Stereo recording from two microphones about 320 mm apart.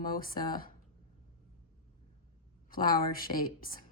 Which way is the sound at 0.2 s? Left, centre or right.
Left.